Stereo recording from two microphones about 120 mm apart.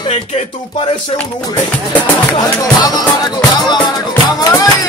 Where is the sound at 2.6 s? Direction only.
30° left (ahead or behind).